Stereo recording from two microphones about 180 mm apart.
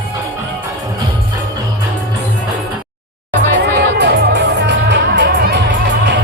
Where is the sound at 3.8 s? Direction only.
70° right (ahead or behind).